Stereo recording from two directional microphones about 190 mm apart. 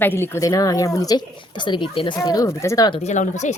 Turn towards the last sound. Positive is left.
turn(degrees=40)  # may be behind; listen again after turning